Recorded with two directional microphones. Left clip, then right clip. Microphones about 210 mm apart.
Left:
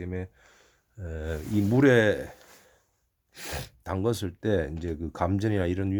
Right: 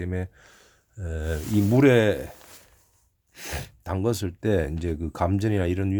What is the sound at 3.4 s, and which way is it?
Speech, 5° left (ahead or behind).